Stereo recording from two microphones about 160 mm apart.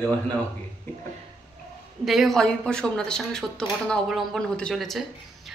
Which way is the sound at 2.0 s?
Centre (ahead or behind).